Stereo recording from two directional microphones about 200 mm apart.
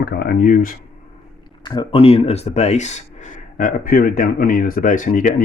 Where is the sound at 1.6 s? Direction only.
20° left (ahead or behind).